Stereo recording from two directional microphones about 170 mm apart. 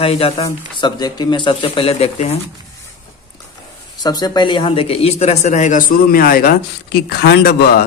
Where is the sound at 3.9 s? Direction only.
20° left (ahead or behind).